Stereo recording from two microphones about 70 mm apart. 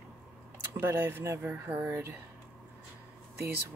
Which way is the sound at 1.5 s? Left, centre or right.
Right.